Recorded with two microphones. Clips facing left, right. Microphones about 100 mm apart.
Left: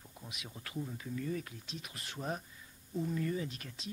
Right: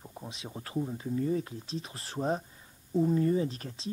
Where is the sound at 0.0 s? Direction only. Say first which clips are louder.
Right 7 dB; 35° right (ahead or behind).